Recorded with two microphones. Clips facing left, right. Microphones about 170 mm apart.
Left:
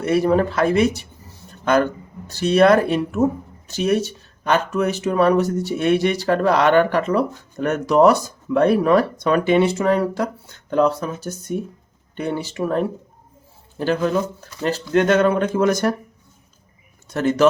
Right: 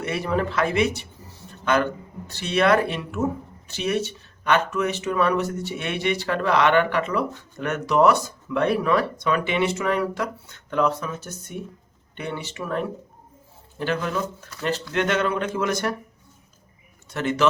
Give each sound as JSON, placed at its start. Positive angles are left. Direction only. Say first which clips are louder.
{"t": 0.0, "sound": "speech", "louder": "left 8 dB", "side_deg": 40}
{"t": 1.5, "sound": "a sound", "louder": "left 4 dB", "side_deg": 40}
{"t": 2.3, "sound": "speech", "louder": "left 6 dB", "side_deg": 40}
{"t": 17.1, "sound": "speech", "louder": "left 6 dB", "side_deg": 40}